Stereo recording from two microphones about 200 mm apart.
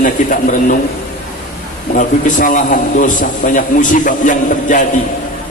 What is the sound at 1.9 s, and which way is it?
A man's voice, 40° left (ahead or behind).